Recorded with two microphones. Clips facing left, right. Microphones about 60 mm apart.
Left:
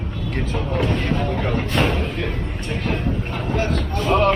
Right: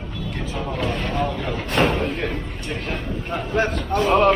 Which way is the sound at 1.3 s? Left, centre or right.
Left.